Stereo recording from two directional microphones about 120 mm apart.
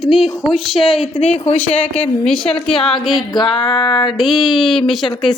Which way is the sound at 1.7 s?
10° left (ahead or behind).